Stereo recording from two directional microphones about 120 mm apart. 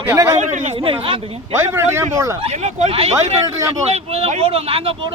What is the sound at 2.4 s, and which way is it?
Speech, 70° right (ahead or behind).